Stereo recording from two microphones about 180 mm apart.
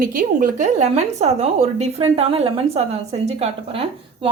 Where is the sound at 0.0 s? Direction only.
50° right (ahead or behind).